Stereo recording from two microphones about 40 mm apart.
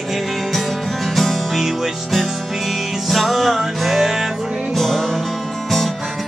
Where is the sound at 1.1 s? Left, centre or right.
Centre.